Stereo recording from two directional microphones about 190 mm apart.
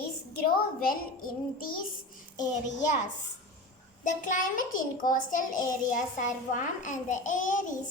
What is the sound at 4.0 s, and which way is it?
A child's voice, 45° left (ahead or behind).